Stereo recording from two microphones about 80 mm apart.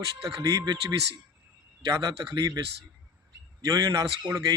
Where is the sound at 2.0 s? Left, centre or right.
Right.